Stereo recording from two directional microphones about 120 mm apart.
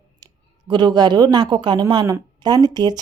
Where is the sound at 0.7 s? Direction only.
35° right (ahead or behind).